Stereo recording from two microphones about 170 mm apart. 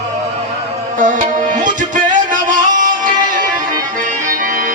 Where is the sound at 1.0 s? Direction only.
50° right (ahead or behind).